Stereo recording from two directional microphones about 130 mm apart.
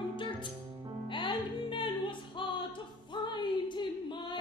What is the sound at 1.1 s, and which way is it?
Music, 40° left (ahead or behind).